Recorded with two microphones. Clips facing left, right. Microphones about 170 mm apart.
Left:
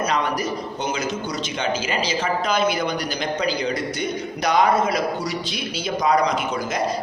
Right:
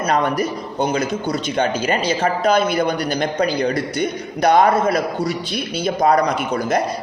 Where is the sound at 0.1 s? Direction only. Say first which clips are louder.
Right 4 dB; 55° right (ahead or behind).